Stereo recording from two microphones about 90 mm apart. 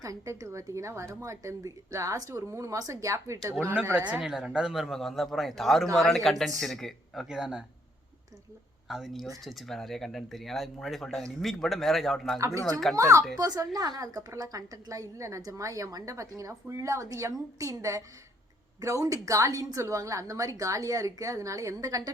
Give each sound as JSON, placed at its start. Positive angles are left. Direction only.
{"t": 0.0, "sound": "a woman's voice", "side_deg": -40}
{"t": 4.2, "sound": "speech", "side_deg": -5}
{"t": 8.9, "sound": "speech", "side_deg": -5}
{"t": 12.4, "sound": "a woman's voice", "side_deg": -35}
{"t": 13.7, "sound": "a woman's voice", "side_deg": -45}